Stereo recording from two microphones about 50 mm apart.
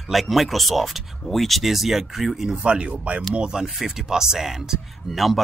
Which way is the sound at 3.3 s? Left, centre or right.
Centre.